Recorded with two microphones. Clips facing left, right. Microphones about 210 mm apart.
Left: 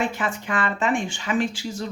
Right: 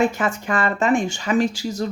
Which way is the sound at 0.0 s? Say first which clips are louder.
Right 5 dB; 45° right (ahead or behind).